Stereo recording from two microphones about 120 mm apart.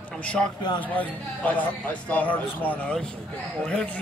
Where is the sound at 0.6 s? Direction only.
40° left (ahead or behind).